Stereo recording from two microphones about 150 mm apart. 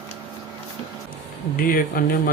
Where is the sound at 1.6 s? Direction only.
70° left (ahead or behind).